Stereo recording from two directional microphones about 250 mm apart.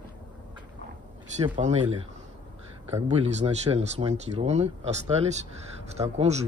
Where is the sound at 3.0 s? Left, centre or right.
Right.